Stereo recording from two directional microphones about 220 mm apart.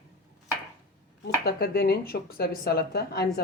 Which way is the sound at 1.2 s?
45° left (ahead or behind).